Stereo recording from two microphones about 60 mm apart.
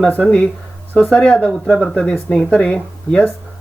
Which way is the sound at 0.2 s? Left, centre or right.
Centre.